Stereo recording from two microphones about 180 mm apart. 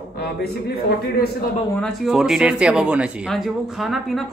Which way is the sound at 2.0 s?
Centre (ahead or behind).